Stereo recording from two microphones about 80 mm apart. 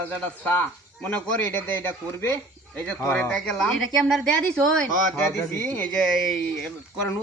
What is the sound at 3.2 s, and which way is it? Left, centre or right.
A man's voice, centre.